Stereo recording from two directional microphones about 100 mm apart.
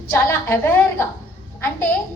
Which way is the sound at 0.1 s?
25° left (ahead or behind).